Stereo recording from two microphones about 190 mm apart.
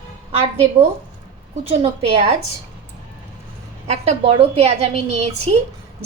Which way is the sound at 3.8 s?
30° right (ahead or behind).